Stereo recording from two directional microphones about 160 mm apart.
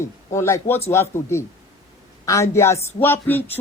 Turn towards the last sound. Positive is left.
turn(degrees=15)  # may be behind; listen again after turning